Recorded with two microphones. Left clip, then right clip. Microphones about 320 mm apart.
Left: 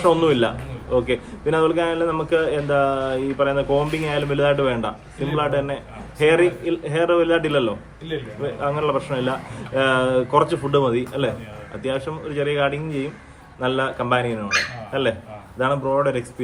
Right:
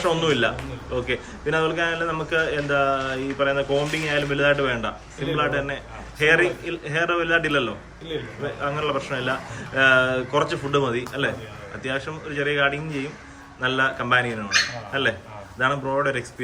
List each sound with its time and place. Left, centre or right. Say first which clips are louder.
0.0 s a man's voice: left 4 dB; centre
15.5 s a man's voice: left 2 dB; centre